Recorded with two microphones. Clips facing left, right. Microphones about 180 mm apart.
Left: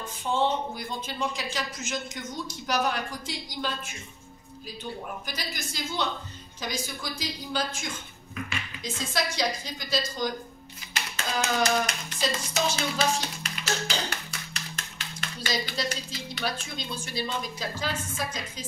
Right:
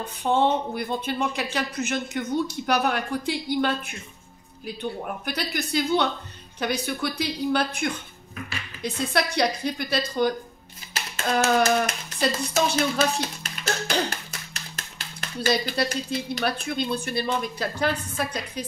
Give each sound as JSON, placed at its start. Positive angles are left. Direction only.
{"t": 0.0, "sound": "speech", "side_deg": -60}
{"t": 5.0, "sound": "speech", "side_deg": -60}
{"t": 14.5, "sound": "typewriter", "side_deg": -40}
{"t": 15.3, "sound": "speech", "side_deg": -60}